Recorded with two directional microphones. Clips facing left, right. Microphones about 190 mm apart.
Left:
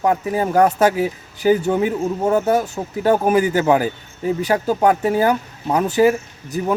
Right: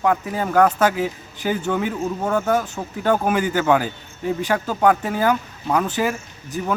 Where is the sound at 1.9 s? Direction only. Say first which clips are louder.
Left 4 dB; 20° left (ahead or behind).